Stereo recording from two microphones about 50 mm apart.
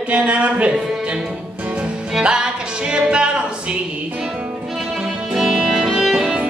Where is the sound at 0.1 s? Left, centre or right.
Right.